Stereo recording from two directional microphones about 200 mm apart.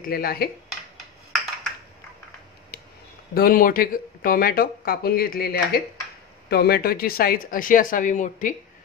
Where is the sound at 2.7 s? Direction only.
50° left (ahead or behind).